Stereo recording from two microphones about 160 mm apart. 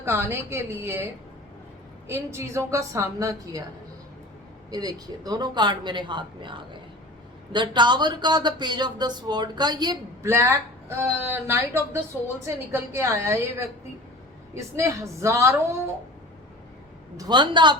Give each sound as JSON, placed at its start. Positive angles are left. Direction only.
{"t": 0.0, "sound": "a woman's voice", "side_deg": -15}
{"t": 2.0, "sound": "a woman's voice", "side_deg": -15}
{"t": 4.7, "sound": "a woman's voice", "side_deg": -25}
{"t": 17.2, "sound": "speech", "side_deg": -30}